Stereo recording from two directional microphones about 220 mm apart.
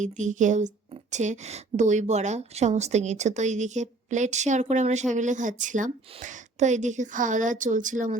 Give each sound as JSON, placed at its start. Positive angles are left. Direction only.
{"t": 0.0, "sound": "a woman's voice", "side_deg": -35}